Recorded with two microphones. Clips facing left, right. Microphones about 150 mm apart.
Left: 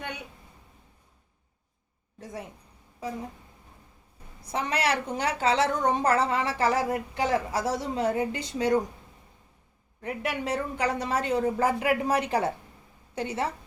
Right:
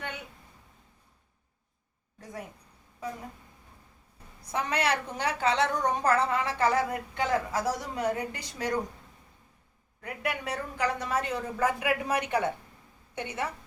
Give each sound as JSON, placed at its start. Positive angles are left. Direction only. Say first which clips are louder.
{"t": 4.5, "sound": "a woman's voice", "louder": "left 1 dB", "side_deg": 25}
{"t": 10.0, "sound": "a woman's voice", "louder": "left 3 dB", "side_deg": 25}